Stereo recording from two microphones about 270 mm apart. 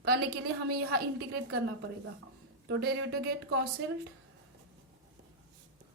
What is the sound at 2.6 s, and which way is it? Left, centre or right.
Speech, right.